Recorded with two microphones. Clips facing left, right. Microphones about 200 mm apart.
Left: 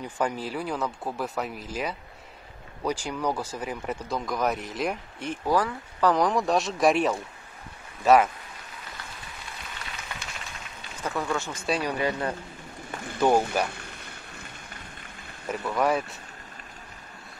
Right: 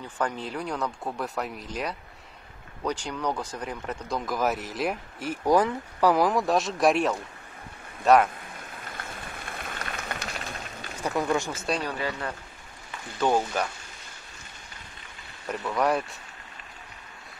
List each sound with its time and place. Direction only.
0.2 s speech: 5° left (ahead or behind)
5.4 s speech: 20° right (ahead or behind); by 8.3 s centre (ahead or behind)
8.5 s a sound: 50° right (ahead or behind)
11.0 s speech: 15° right (ahead or behind)
11.8 s speech: 15° left (ahead or behind)
15.4 s speech: centre (ahead or behind)